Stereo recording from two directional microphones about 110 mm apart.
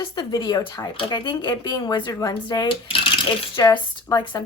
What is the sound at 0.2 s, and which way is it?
Speech, 40° left (ahead or behind).